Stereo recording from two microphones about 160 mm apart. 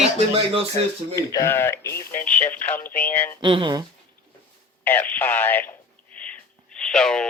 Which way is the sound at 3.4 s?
30° right (ahead or behind).